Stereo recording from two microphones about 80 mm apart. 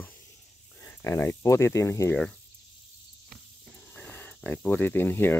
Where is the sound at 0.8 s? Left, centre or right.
Left.